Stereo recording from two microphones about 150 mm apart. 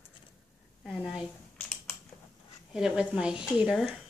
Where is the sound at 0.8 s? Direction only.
5° right (ahead or behind).